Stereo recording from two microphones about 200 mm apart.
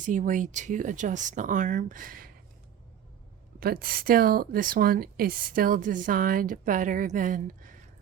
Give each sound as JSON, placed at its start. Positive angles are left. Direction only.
{"t": 0.0, "sound": "speech", "side_deg": -40}
{"t": 3.6, "sound": "speech", "side_deg": -45}